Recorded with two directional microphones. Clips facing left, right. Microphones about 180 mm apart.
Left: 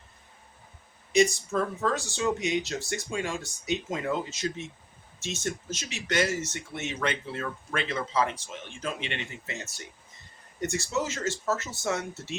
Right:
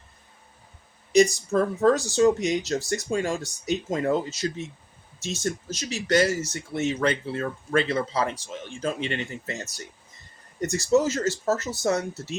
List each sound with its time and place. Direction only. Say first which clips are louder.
1.1 s speech: right 4 dB; 35° right (ahead or behind)